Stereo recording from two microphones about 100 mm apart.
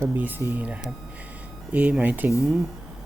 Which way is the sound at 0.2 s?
20° right (ahead or behind).